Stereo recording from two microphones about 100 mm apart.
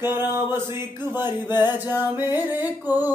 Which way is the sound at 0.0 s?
25° right (ahead or behind).